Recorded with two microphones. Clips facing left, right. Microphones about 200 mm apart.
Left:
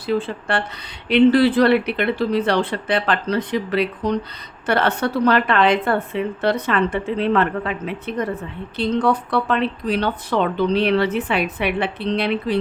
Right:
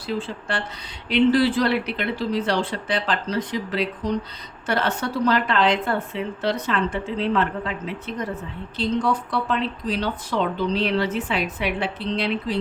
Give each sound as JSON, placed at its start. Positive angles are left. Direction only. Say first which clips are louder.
{"t": 0.1, "sound": "speech", "louder": "left 6 dB", "side_deg": 60}